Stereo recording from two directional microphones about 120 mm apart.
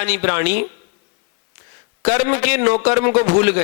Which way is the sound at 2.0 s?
20° right (ahead or behind).